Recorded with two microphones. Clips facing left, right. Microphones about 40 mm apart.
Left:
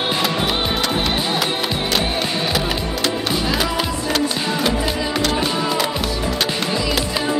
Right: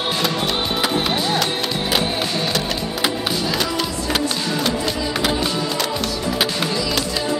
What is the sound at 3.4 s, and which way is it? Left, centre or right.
Music, centre.